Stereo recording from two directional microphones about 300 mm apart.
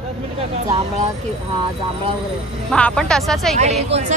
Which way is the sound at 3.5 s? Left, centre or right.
Right.